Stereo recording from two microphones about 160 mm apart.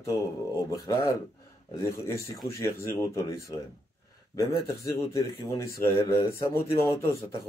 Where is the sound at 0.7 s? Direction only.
25° left (ahead or behind).